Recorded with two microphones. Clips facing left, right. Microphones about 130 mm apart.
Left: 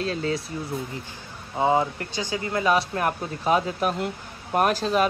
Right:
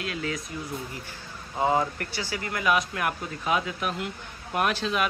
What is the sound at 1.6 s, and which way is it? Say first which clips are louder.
Speech: left 3 dB; 20° left (ahead or behind).